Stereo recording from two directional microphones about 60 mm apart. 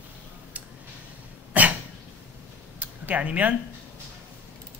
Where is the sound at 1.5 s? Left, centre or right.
Right.